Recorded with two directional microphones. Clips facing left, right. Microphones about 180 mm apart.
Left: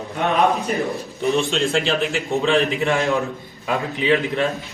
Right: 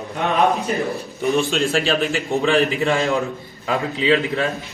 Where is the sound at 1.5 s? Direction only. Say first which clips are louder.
Right 1 dB; 20° left (ahead or behind).